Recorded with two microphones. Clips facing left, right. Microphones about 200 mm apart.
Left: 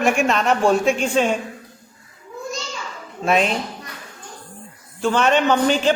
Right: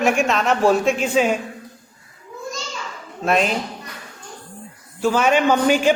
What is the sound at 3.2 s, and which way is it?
Speech, centre (ahead or behind).